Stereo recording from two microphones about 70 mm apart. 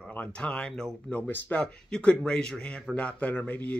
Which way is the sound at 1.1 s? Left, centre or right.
Left.